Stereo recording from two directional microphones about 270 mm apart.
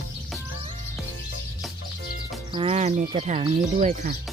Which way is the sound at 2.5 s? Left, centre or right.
Centre.